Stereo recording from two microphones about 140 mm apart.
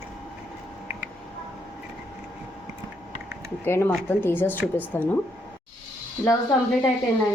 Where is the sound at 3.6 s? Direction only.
15° left (ahead or behind).